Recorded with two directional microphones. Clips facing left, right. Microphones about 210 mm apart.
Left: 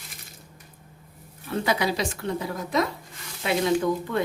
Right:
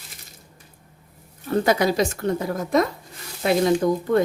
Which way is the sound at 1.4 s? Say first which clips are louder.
Right 6 dB; 45° right (ahead or behind).